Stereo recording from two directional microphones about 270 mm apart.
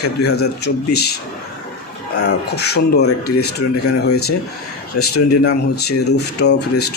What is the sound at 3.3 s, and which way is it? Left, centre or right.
Speech, left.